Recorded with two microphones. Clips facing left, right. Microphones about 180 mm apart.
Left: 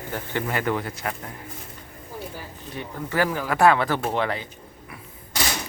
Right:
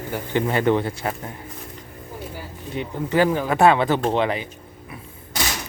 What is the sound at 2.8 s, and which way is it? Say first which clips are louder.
Speech: right 5 dB; 20° right (ahead or behind).